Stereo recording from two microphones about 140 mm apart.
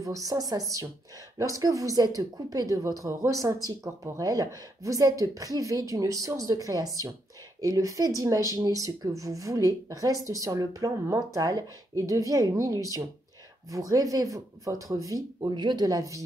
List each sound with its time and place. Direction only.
0.0 s speech: 25° right (ahead or behind)